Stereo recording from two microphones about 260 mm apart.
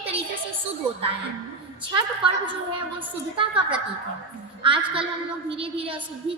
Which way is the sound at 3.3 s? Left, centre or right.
Centre.